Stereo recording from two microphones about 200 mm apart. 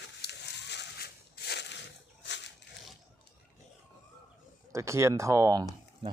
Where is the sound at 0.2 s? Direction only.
55° left (ahead or behind).